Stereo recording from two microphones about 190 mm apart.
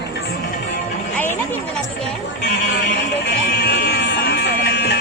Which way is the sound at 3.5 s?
55° left (ahead or behind).